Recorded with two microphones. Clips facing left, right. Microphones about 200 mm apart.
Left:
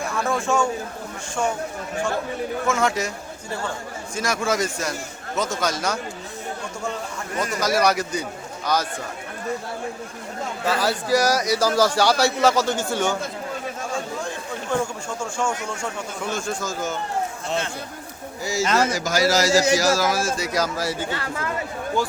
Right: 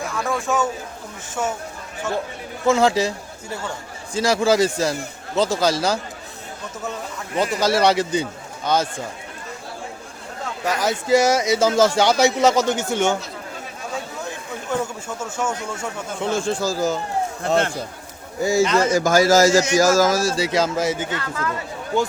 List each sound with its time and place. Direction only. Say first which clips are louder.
0.2 s speech: even; centre (ahead or behind)
2.6 s a man's voice: right 7 dB; 30° right (ahead or behind)
4.1 s a man's voice: right 6 dB; 30° right (ahead or behind)
7.6 s speech: right 2 dB; 30° right (ahead or behind)
10.7 s speech: right 3 dB; 20° right (ahead or behind)
14.7 s speech: even; 5° right (ahead or behind)
16.2 s a man's voice: right 6 dB; 30° right (ahead or behind)
18.4 s a man's voice: right 4 dB; 55° right (ahead or behind); by 21.2 s 20° right (ahead or behind)
21.2 s speech: right 2 dB; 25° left (ahead or behind)